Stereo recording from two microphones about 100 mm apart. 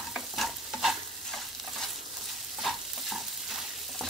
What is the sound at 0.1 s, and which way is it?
Stir, 5° right (ahead or behind).